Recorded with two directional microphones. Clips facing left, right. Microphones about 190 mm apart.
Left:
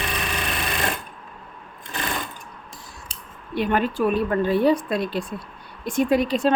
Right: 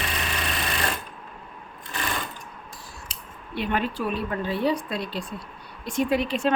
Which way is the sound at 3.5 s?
45° left (ahead or behind).